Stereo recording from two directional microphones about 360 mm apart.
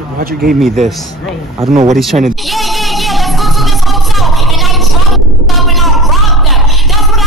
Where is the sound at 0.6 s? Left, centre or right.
Centre.